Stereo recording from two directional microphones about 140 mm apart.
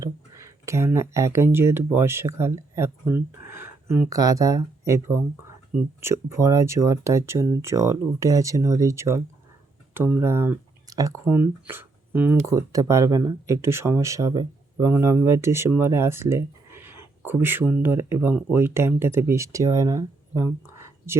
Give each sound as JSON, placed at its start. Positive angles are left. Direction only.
{"t": 0.0, "sound": "a sound", "side_deg": -20}
{"t": 1.5, "sound": "speech", "side_deg": -15}
{"t": 11.3, "sound": "speech", "side_deg": -15}
{"t": 12.5, "sound": "speech", "side_deg": -25}